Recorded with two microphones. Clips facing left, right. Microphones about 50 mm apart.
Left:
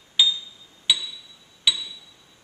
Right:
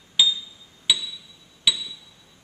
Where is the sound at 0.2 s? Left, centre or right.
Centre.